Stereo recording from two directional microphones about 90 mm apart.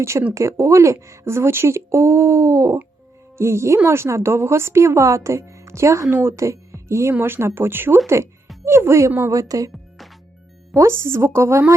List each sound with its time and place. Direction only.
0.0 s speech: 30° right (ahead or behind)
10.8 s speech: 30° right (ahead or behind)